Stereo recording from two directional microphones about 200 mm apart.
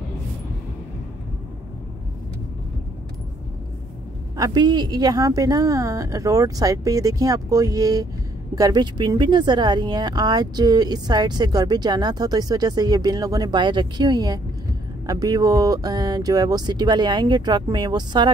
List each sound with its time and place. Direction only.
4.4 s speech: 20° right (ahead or behind)